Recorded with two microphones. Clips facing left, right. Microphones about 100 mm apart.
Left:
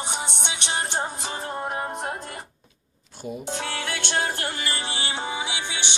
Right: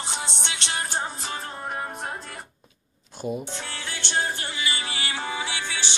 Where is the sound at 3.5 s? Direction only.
60° left (ahead or behind).